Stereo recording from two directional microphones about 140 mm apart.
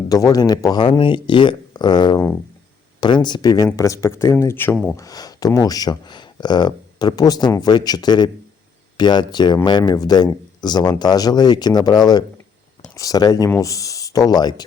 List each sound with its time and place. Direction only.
0.1 s a man's voice: 25° left (ahead or behind)
4.9 s a man's voice: 25° left (ahead or behind)